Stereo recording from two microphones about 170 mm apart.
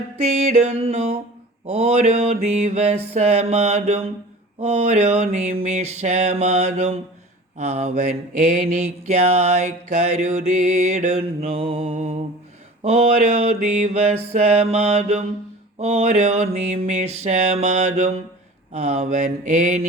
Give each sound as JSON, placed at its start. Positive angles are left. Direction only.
{"t": 0.2, "sound": "mantra", "side_deg": -40}